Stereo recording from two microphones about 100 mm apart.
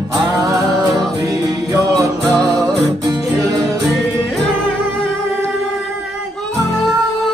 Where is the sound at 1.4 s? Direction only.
30° right (ahead or behind).